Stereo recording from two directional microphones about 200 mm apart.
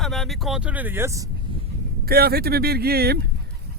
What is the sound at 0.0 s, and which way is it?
Speech, centre (ahead or behind).